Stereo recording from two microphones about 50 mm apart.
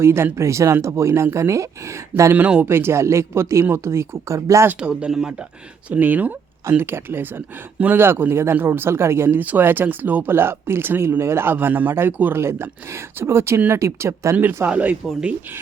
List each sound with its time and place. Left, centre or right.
0.0 s speech: right
0.3 s speech: right
2.3 s speech: right
2.6 s speech: right
4.8 s speech: centre
5.9 s speech: right
6.7 s speech: right
9.4 s speech: right
10.3 s speech: right
11.5 s speech: right
12.4 s speech: right
14.7 s speech: right